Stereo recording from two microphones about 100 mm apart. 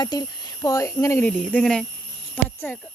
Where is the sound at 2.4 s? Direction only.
15° left (ahead or behind).